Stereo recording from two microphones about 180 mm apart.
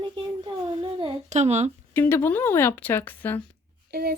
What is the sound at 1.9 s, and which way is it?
Speech, 15° left (ahead or behind).